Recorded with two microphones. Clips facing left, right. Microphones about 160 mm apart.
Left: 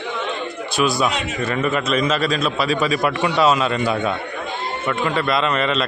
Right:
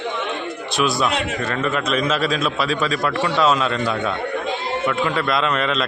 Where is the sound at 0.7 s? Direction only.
Centre (ahead or behind).